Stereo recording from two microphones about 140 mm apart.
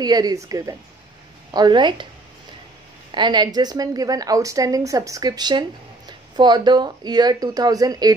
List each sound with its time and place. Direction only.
0.0 s a woman's voice: 30° right (ahead or behind)
3.1 s speech: 35° right (ahead or behind)